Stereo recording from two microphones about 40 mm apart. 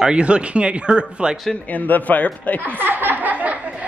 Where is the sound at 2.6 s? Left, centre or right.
Right.